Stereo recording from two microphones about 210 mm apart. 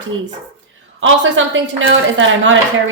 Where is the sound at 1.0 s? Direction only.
65° right (ahead or behind).